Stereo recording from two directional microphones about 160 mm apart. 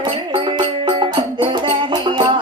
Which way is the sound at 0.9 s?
30° right (ahead or behind).